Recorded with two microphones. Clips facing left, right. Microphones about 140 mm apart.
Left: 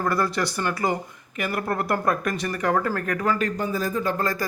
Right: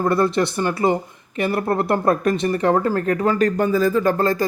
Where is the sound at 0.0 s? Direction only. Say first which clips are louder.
Right 6 dB; 25° right (ahead or behind).